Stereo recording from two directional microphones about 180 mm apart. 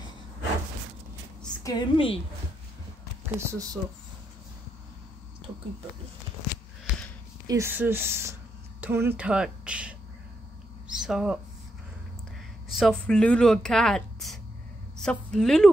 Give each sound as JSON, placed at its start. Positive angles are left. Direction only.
{"t": 1.4, "sound": "a woman's voice", "side_deg": 20}
{"t": 3.3, "sound": "speech", "side_deg": -15}
{"t": 7.4, "sound": "speech", "side_deg": -15}
{"t": 10.9, "sound": "a sound", "side_deg": -5}
{"t": 12.7, "sound": "a woman's voice", "side_deg": 0}